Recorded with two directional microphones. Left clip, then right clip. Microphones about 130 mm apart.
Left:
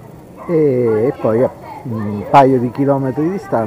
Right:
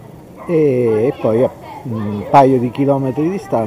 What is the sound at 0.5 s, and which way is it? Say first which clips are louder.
Speech: even; 35° right (ahead or behind).